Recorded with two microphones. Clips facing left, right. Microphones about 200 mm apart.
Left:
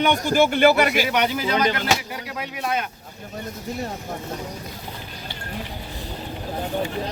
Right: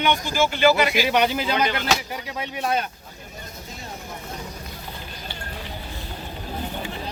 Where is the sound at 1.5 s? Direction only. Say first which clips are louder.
Left 2 dB; 35° left (ahead or behind).